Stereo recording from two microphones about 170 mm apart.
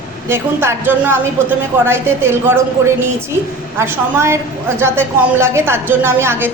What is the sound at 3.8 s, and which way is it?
A woman's voice, 15° right (ahead or behind).